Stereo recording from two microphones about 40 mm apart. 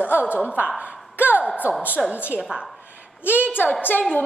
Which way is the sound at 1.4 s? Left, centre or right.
Right.